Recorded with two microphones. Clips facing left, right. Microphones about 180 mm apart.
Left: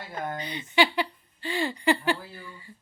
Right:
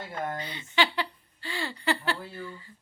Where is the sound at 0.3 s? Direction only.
15° left (ahead or behind).